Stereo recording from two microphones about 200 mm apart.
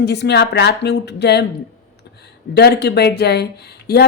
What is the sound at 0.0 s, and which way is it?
A woman's voice, 55° left (ahead or behind).